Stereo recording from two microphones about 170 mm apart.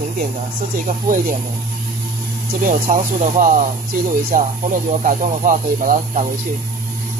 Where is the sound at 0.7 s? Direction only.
50° right (ahead or behind).